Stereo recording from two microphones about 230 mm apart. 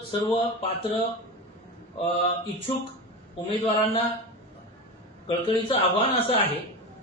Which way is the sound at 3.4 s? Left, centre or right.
Left.